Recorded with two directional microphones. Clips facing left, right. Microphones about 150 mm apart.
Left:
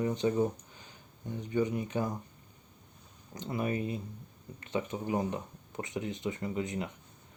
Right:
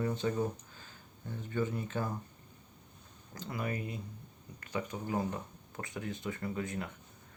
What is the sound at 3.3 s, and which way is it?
Speech, 25° left (ahead or behind).